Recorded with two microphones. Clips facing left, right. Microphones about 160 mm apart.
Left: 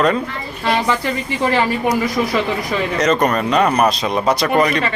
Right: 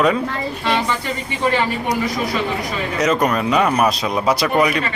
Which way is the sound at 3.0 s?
5° right (ahead or behind).